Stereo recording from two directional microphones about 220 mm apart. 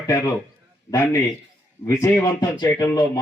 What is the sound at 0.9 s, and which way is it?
Speech, 15° left (ahead or behind).